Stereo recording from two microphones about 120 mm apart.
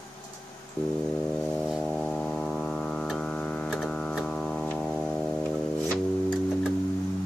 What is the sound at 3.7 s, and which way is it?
Hum, 5° left (ahead or behind).